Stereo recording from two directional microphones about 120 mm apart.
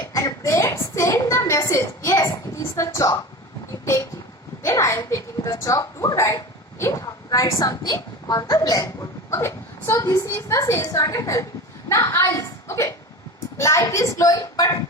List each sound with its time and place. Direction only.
0.1 s a sound: 25° left (ahead or behind)
2.7 s a woman's voice: 25° left (ahead or behind)
4.6 s a child's voice: 25° left (ahead or behind)